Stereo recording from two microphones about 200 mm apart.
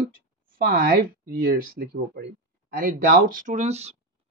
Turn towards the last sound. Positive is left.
turn(degrees=-35)  # may be behind; listen again after turning